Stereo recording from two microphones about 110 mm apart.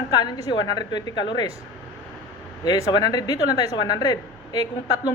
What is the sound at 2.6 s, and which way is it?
Speech, 35° left (ahead or behind).